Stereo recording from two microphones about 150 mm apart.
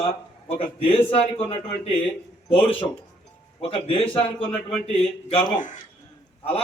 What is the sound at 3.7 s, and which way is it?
A man's voice, 40° left (ahead or behind).